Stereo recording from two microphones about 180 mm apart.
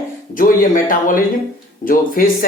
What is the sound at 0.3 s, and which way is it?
Speech, 50° left (ahead or behind).